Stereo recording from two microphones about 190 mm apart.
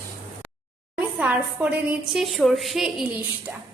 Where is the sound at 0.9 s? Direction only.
5° right (ahead or behind).